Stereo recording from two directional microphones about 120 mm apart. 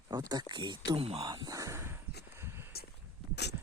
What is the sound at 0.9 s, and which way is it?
Speech, 55° right (ahead or behind).